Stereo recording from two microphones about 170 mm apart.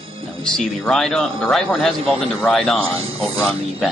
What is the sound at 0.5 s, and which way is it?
Speech, 5° left (ahead or behind).